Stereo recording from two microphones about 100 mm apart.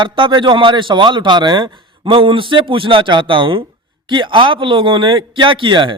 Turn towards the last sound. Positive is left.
turn(degrees=-55)  # may be behind; listen again after turning